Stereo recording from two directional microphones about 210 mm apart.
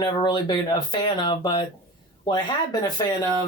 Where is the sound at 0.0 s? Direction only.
20° left (ahead or behind).